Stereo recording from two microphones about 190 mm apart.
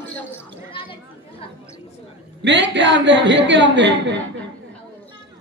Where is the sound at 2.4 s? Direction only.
70° right (ahead or behind).